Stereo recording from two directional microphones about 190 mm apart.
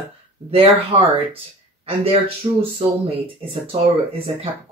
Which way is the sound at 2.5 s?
25° right (ahead or behind).